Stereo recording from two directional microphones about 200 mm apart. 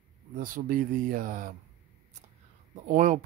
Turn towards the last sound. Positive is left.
turn(degrees=-40)  # may be behind; listen again after turning